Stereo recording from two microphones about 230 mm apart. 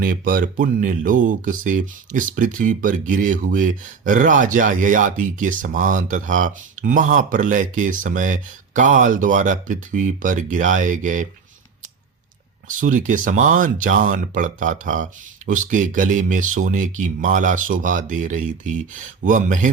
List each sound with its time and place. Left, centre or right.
0.0 s speech: right
12.6 s speech: right